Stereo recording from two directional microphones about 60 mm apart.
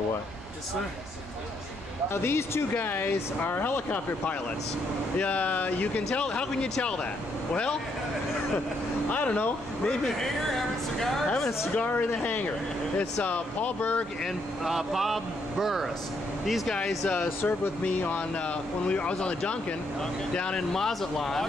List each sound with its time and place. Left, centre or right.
2.0 s speech: left
6.1 s speech: centre
9.1 s speech: left
9.8 s speech: centre
11.7 s speech: left
14.2 s speech: centre
17.1 s speech: left; by 21.5 s centre